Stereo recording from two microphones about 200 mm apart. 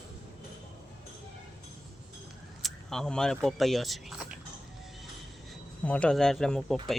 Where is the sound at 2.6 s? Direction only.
Centre (ahead or behind).